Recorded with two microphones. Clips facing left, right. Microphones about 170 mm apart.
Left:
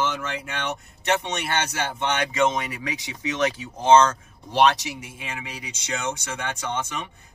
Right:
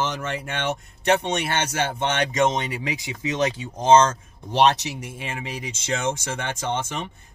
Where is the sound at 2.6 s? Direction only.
30° right (ahead or behind).